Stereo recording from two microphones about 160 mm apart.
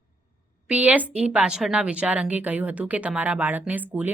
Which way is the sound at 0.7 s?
10° right (ahead or behind).